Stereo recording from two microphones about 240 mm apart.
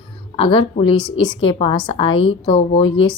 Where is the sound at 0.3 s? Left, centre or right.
Left.